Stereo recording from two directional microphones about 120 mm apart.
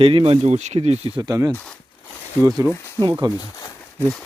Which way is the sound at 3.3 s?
30° left (ahead or behind).